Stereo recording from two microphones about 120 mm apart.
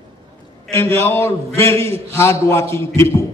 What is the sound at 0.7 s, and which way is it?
A man's voice, 20° left (ahead or behind).